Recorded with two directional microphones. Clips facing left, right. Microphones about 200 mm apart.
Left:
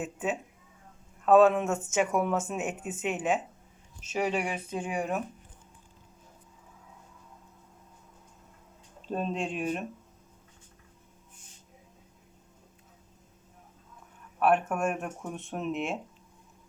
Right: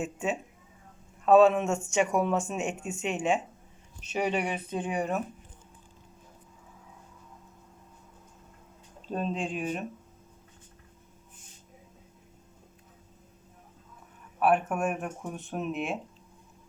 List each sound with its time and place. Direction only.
0.0 s speech: centre (ahead or behind)
9.0 s speech: centre (ahead or behind)
14.3 s speech: centre (ahead or behind)